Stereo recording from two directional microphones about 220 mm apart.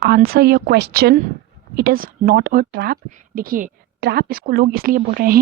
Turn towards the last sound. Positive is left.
turn(degrees=-40)  # may be behind; listen again after turning